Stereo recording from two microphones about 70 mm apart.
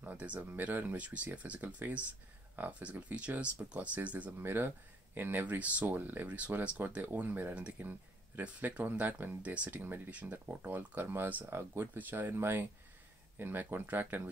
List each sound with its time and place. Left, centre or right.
0.0 s a sound: centre
0.5 s speech: right
4.4 s speech: right